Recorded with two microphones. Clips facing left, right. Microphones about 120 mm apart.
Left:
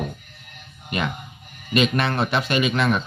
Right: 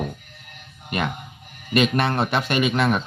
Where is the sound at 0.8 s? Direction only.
50° right (ahead or behind).